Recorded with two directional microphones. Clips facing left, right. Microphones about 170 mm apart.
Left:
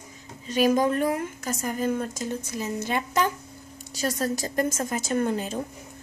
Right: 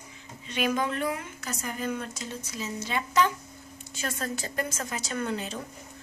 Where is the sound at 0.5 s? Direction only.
40° left (ahead or behind).